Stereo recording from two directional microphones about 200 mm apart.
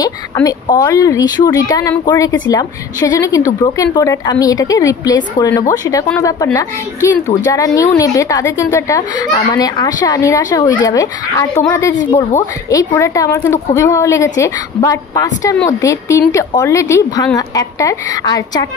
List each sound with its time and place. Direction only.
0.0 s speech: 20° left (ahead or behind)